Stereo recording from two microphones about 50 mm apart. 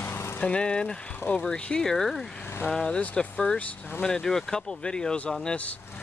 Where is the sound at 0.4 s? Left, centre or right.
Left.